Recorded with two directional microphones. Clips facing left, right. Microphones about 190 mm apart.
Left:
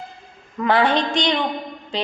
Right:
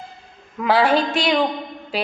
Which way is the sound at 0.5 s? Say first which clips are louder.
Right 1 dB; 5° right (ahead or behind).